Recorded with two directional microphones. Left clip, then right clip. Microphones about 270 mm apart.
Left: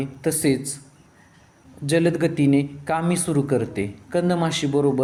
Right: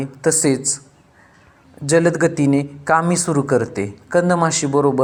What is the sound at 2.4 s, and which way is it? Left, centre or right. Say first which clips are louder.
Speech: right 2 dB; right.